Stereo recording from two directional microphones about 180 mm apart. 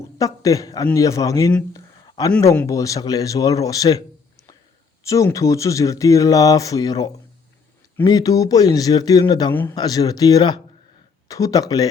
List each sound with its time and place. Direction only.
0.0 s a man's voice: 20° left (ahead or behind)
1.7 s a sound: 20° left (ahead or behind)
2.4 s speech: 15° left (ahead or behind)
5.0 s speech: 15° left (ahead or behind)